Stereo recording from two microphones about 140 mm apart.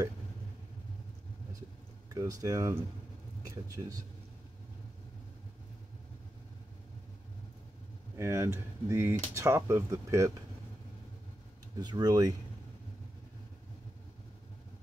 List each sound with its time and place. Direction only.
2.0 s speech: 25° right (ahead or behind)
8.2 s speech: 20° right (ahead or behind)
11.8 s speech: 30° right (ahead or behind)